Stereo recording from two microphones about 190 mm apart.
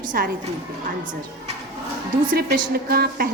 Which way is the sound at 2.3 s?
45° right (ahead or behind).